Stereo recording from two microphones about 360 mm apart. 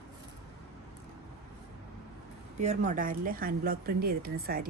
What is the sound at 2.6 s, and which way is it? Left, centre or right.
Speech, centre.